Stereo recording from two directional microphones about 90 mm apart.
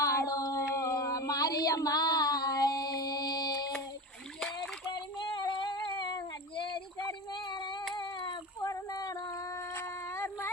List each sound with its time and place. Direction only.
0.0 s a sound: 40° left (ahead or behind)
4.4 s splash: 5° left (ahead or behind)
4.9 s female singing: 60° left (ahead or behind)
7.9 s child singing: 60° left (ahead or behind)
8.6 s female singing: 40° left (ahead or behind)
9.7 s a sound: 25° left (ahead or behind)